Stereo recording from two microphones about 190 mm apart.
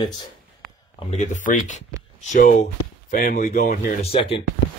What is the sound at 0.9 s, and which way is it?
Speech, 35° left (ahead or behind).